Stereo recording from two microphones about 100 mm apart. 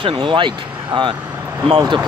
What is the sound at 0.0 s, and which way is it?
Speech, 55° right (ahead or behind).